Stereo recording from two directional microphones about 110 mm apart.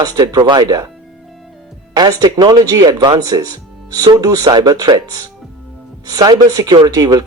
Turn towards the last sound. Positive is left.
turn(degrees=-35)  # may be behind; listen again after turning